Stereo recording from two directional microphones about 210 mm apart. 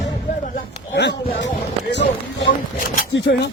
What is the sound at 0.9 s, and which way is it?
Speech, 55° left (ahead or behind).